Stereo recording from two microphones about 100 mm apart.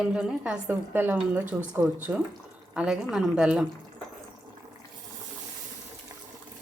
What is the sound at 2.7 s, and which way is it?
Speech, 5° right (ahead or behind).